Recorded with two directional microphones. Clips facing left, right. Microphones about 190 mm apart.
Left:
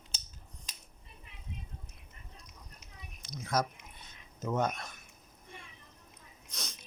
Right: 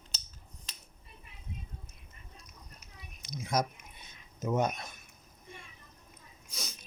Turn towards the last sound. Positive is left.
turn(degrees=0)  # may be behind; listen again after turning